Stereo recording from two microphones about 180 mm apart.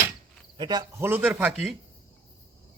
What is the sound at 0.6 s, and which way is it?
Speech, 20° right (ahead or behind).